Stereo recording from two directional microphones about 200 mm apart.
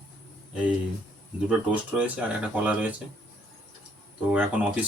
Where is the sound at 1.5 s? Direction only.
5° right (ahead or behind).